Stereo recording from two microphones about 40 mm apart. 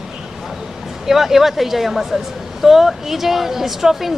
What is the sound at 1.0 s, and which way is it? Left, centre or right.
A woman's voice, centre.